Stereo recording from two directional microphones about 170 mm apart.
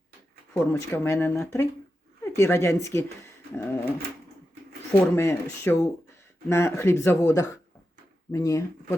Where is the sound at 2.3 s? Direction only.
15° left (ahead or behind).